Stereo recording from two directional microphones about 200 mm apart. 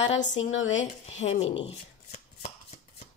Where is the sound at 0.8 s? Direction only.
35° left (ahead or behind).